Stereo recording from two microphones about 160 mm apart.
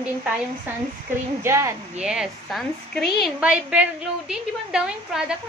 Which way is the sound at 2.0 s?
5° right (ahead or behind).